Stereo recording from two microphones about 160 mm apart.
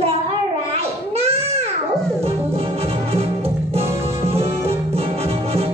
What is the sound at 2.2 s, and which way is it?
Music, 40° right (ahead or behind).